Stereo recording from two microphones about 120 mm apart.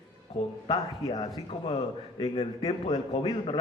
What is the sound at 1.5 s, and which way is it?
A man's voice, 55° left (ahead or behind).